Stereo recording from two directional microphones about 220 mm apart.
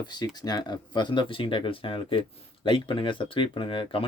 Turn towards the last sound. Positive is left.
turn(degrees=25)  # may be behind; listen again after turning